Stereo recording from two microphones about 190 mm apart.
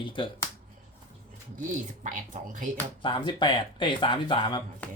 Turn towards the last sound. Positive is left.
turn(degrees=25)  # may be behind; listen again after turning